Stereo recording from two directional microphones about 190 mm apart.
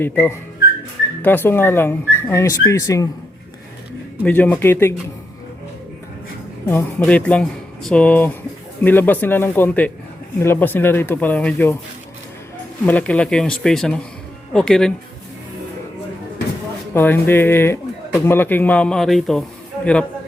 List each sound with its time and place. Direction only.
0.0 s speech: 10° left (ahead or behind)
4.2 s speech: 10° left (ahead or behind)
6.7 s speech: 10° left (ahead or behind)
12.8 s speech: 10° left (ahead or behind)
16.9 s speech: 10° left (ahead or behind)